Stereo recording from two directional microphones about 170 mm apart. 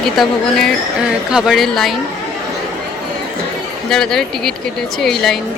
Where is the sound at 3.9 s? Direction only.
5° left (ahead or behind).